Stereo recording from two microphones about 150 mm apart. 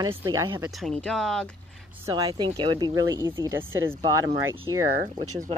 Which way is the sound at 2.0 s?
25° right (ahead or behind).